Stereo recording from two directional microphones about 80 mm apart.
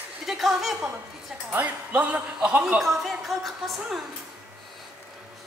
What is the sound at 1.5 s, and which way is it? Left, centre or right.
Speech, right.